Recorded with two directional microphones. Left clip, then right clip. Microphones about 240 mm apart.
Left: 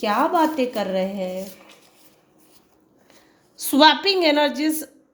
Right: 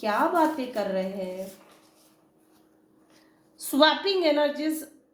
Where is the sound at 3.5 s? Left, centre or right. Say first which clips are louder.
Left 6 dB; left.